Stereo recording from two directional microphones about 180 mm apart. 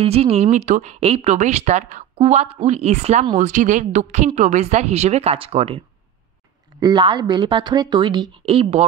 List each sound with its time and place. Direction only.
0.0 s speech: 35° right (ahead or behind)
6.8 s a woman's voice: 25° right (ahead or behind)